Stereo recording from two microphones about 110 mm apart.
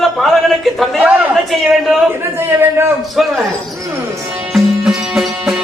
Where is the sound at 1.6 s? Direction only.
Centre (ahead or behind).